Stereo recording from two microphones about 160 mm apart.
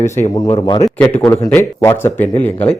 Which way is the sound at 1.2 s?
15° left (ahead or behind).